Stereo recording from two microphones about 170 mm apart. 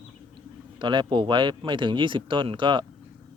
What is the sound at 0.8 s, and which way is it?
Speech, 30° right (ahead or behind).